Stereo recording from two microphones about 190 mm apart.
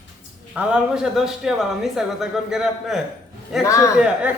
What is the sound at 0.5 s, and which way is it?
Speech, 5° right (ahead or behind).